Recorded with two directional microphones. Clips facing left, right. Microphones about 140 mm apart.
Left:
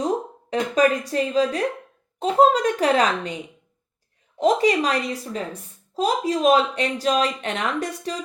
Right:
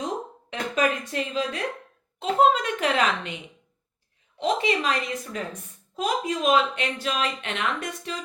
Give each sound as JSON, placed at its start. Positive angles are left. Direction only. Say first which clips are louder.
{"t": 0.8, "sound": "speech", "louder": "left 5 dB", "side_deg": 35}